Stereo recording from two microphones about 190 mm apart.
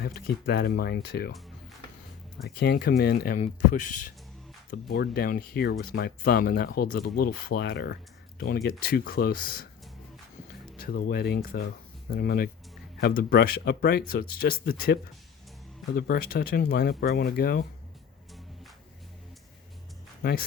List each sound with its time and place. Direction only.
0.0 s speech: 55° left (ahead or behind)
2.4 s speech: 60° left (ahead or behind)
3.4 s speech: 40° left (ahead or behind)
4.7 s speech: 55° left (ahead or behind)
10.8 s speech: 55° left (ahead or behind)
16.0 s speech: 50° left (ahead or behind)
20.2 s speech: 50° left (ahead or behind)